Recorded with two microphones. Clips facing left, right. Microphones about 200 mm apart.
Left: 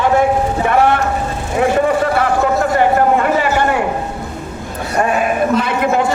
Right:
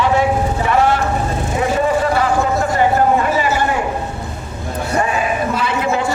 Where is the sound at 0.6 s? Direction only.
55° left (ahead or behind).